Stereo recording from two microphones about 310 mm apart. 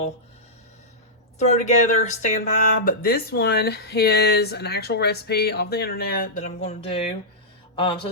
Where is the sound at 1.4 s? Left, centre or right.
Left.